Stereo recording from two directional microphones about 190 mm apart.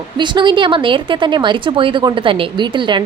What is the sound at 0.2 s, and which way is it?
A woman's voice, 25° right (ahead or behind).